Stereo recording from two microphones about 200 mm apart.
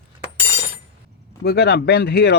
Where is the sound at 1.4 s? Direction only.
55° left (ahead or behind).